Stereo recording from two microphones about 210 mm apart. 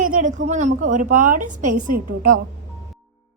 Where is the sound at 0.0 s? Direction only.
40° right (ahead or behind).